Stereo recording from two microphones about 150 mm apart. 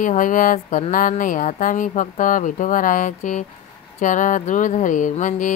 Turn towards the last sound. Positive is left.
turn(degrees=55)  # may be behind; listen again after turning